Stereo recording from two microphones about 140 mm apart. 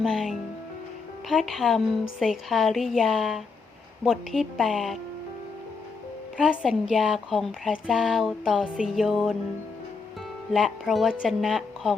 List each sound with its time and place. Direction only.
0.0 s speech: centre (ahead or behind)
6.3 s speech: 5° right (ahead or behind)
10.5 s speech: 5° right (ahead or behind)